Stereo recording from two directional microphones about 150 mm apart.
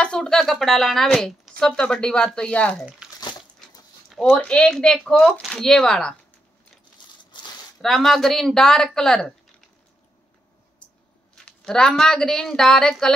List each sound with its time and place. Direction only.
0.0 s speech: 5° left (ahead or behind)
3.0 s bathtub: 5° right (ahead or behind)
4.1 s a sound: centre (ahead or behind)
4.4 s speech: 5° left (ahead or behind)
7.2 s a sound: 30° left (ahead or behind)
7.8 s speech: centre (ahead or behind)
11.4 s speech: 5° left (ahead or behind)